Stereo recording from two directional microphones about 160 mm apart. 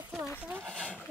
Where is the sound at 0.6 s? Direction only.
5° left (ahead or behind).